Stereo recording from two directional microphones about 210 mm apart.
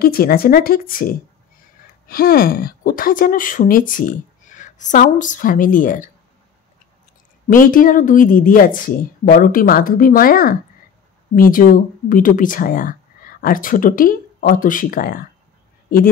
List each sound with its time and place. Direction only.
0.0 s speech: 45° left (ahead or behind)
7.4 s speech: 40° left (ahead or behind)